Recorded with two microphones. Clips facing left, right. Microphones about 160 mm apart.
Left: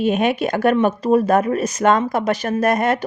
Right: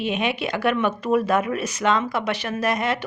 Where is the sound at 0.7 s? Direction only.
35° left (ahead or behind).